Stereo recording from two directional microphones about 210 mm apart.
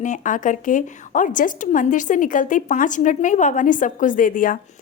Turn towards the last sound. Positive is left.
turn(degrees=40)  # may be behind; listen again after turning